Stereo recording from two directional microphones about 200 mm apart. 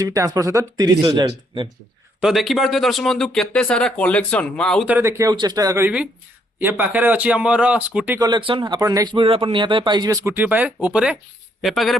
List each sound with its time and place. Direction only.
0.0 s speech: 15° right (ahead or behind)
2.2 s speech: centre (ahead or behind)
4.9 s speech: 10° right (ahead or behind)
8.2 s speech: 25° right (ahead or behind); by 11.9 s centre (ahead or behind)